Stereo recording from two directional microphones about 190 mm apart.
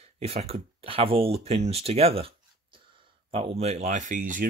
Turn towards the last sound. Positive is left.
turn(degrees=-45)  # may be behind; listen again after turning